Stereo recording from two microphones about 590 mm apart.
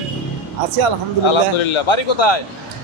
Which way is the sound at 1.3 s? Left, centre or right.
Left.